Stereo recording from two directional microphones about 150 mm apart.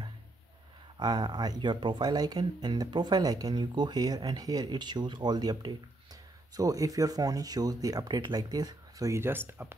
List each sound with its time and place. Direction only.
0.9 s speech: 30° right (ahead or behind)